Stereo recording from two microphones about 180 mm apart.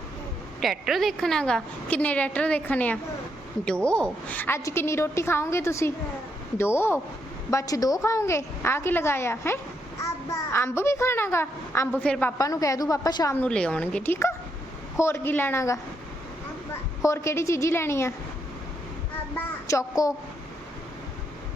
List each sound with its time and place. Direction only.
0.6 s a woman's voice: centre (ahead or behind)
12.4 s a woman's voice: 20° left (ahead or behind)
13.3 s a woman's voice: 5° left (ahead or behind)
17.0 s a woman's voice: 15° left (ahead or behind)
19.6 s a woman's voice: 20° left (ahead or behind)